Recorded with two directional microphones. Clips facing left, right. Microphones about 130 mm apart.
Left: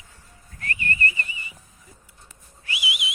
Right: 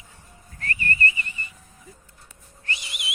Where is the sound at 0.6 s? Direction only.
35° right (ahead or behind).